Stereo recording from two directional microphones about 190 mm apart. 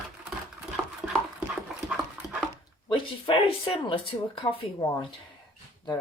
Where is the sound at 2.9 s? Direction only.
25° left (ahead or behind).